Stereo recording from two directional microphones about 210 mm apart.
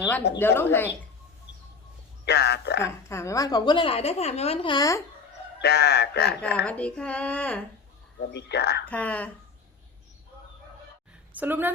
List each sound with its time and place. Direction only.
0.3 s speech: 10° left (ahead or behind)
2.2 s speech: 50° left (ahead or behind)
3.1 s a woman's voice: 15° left (ahead or behind)
5.6 s speech: 50° left (ahead or behind)
6.7 s speech: 5° left (ahead or behind)
8.3 s speech: 55° left (ahead or behind)
8.9 s speech: 5° left (ahead or behind)
11.3 s a woman's voice: 10° right (ahead or behind)